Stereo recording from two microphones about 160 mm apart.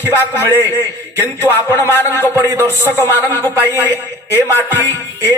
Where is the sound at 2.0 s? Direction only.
15° left (ahead or behind).